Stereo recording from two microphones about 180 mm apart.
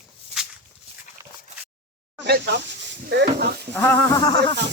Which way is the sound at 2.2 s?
65° right (ahead or behind).